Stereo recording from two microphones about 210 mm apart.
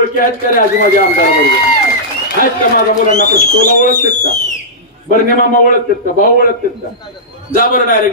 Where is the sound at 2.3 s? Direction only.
40° left (ahead or behind).